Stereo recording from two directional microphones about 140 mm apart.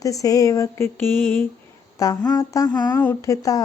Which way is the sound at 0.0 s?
25° left (ahead or behind).